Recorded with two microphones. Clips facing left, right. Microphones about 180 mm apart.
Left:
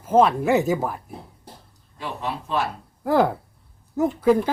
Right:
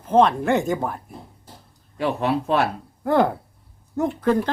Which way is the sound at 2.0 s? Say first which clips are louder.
Right 8 dB; 65° right (ahead or behind).